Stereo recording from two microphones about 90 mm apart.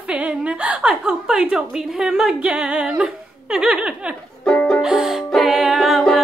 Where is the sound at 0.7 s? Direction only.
10° right (ahead or behind).